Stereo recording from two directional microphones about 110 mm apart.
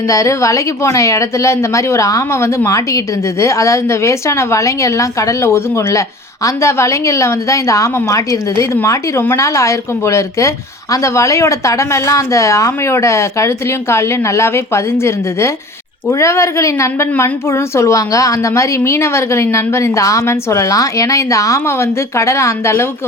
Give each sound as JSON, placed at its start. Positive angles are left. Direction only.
{"t": 0.1, "sound": "a woman's voice", "side_deg": 30}